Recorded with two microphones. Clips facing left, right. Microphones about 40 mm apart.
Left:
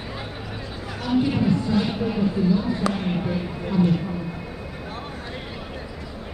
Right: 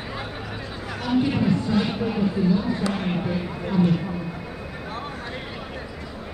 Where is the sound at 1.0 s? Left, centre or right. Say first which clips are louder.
Even; right.